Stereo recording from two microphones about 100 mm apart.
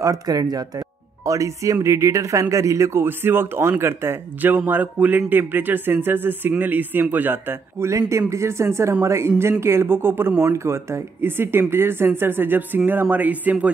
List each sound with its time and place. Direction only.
0.0 s speech: 40° right (ahead or behind); by 13.7 s 15° right (ahead or behind)